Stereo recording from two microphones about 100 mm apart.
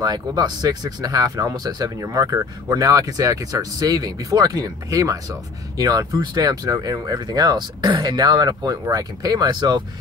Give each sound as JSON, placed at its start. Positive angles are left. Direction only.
{"t": 0.0, "sound": "speech", "side_deg": -40}